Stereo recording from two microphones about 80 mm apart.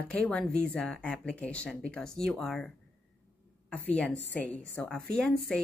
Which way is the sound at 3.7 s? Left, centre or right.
Centre.